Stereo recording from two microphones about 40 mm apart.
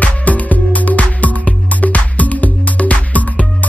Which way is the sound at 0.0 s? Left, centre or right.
Left.